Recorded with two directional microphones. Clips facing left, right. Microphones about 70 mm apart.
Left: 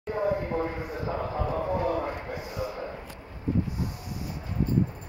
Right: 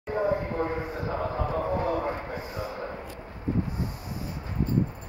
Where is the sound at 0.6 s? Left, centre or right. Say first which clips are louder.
Right 1 dB; right.